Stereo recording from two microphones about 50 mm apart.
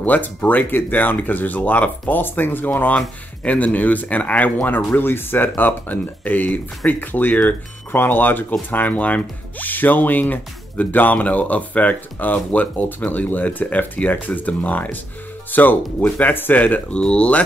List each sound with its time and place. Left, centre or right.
0.0 s speech: left
16.9 s speech: left